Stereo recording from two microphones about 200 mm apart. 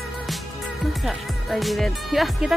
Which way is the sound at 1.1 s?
Centre (ahead or behind).